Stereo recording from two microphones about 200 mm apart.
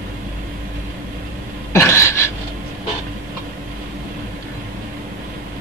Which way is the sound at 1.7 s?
15° left (ahead or behind).